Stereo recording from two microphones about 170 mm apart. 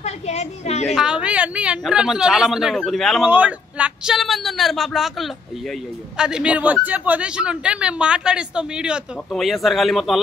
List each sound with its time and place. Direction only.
0.0 s a woman's voice: 40° left (ahead or behind)
0.8 s speech: 5° right (ahead or behind)